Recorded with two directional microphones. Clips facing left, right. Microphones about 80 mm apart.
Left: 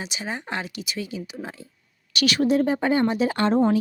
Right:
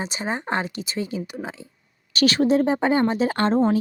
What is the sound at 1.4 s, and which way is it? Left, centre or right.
Speech, right.